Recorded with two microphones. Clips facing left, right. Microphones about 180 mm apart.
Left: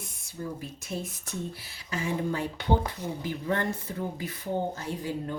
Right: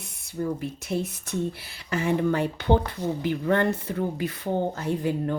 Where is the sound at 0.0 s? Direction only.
65° right (ahead or behind).